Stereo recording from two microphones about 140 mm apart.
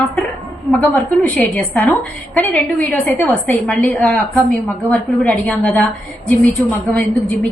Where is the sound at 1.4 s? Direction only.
10° left (ahead or behind).